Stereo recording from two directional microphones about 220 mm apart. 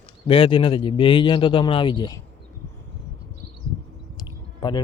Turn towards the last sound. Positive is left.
turn(degrees=20)  # may be behind; listen again after turning